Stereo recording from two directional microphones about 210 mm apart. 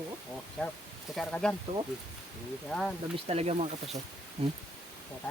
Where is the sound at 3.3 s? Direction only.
30° right (ahead or behind).